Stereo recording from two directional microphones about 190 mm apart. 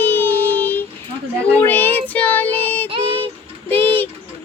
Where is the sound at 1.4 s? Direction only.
10° left (ahead or behind).